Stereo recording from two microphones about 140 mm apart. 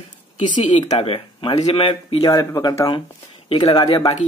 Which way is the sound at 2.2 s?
30° left (ahead or behind).